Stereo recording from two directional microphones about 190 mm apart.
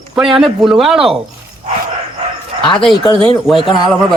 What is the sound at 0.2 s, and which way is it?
Speech, centre (ahead or behind).